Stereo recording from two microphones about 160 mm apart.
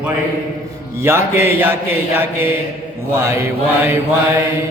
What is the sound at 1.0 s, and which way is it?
A man's voice, 15° right (ahead or behind).